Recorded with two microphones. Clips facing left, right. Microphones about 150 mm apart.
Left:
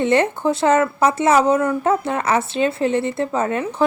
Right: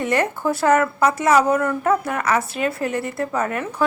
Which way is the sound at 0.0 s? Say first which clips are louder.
Left 4 dB; 25° left (ahead or behind).